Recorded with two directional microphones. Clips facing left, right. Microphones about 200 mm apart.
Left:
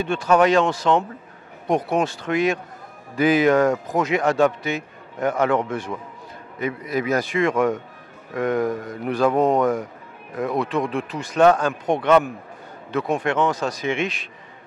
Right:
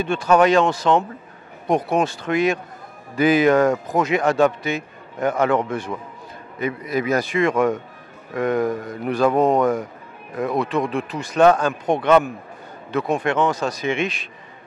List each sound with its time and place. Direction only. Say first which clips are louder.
0.0 s speech: right 1 dB; 10° right (ahead or behind)
6.6 s speech: right 1 dB; 10° right (ahead or behind)
9.3 s speech: right 1 dB; 25° right (ahead or behind); by 14.2 s 10° right (ahead or behind)